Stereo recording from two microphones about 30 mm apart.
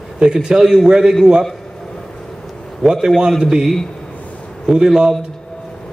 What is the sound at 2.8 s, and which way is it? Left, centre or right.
A man's voice, centre.